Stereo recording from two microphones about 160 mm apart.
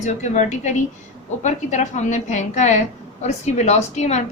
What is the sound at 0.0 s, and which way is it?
A woman's voice, 45° left (ahead or behind).